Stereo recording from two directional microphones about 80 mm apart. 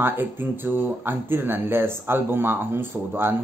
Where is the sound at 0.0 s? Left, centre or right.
Right.